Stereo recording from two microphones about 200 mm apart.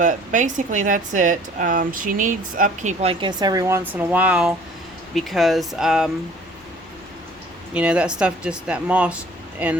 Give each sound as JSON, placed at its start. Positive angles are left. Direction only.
{"t": 0.0, "sound": "speech", "side_deg": -40}
{"t": 7.7, "sound": "speech", "side_deg": -5}